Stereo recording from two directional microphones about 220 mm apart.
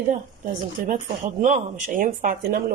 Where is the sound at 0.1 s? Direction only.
35° right (ahead or behind).